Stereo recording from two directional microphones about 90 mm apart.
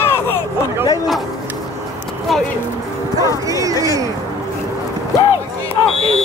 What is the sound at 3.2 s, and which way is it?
Bow-wow, 40° left (ahead or behind).